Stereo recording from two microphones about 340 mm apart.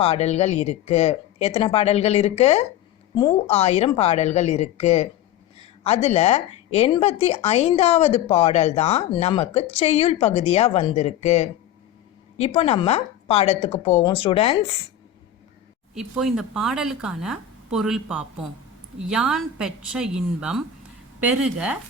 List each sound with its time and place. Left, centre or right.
0.0 s a woman's voice: centre
12.5 s speech: centre
16.0 s speech: centre